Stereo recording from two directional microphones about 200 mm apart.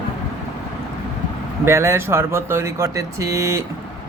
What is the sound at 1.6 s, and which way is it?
Speech, 15° right (ahead or behind).